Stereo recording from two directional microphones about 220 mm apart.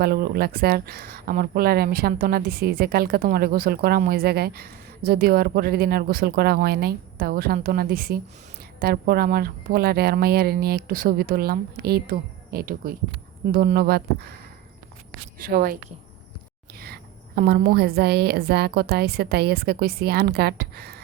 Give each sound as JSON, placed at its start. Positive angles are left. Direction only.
{"t": 0.0, "sound": "speech", "side_deg": -45}
{"t": 15.4, "sound": "a woman's voice", "side_deg": -40}